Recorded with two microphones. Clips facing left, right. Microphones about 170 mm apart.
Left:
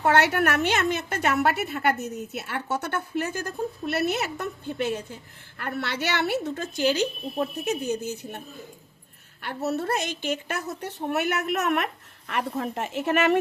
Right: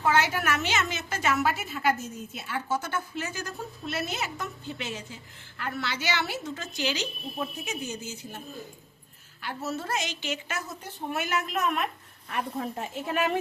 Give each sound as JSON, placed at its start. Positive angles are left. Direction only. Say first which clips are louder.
{"t": 0.0, "sound": "a woman's voice", "louder": "left 4 dB", "side_deg": 65}
{"t": 9.4, "sound": "a woman's voice", "louder": "left 5 dB", "side_deg": 60}